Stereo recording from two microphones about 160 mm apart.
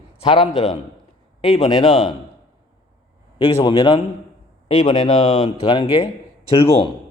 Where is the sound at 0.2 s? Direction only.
35° left (ahead or behind).